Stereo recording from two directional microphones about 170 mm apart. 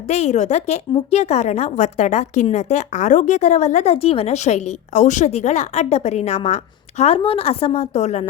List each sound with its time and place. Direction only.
0.1 s a woman's voice: 40° left (ahead or behind)